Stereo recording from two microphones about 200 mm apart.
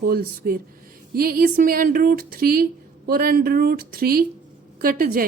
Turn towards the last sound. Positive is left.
turn(degrees=-45)  # may be behind; listen again after turning